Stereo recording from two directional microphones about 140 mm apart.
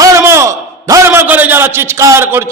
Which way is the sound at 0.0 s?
20° right (ahead or behind).